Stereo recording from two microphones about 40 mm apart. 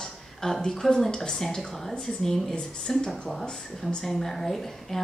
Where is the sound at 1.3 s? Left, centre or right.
Centre.